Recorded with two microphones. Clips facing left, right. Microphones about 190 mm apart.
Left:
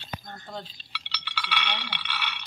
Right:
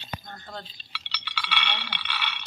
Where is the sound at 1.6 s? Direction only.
10° left (ahead or behind).